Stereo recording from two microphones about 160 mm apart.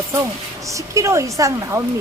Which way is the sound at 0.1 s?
20° right (ahead or behind).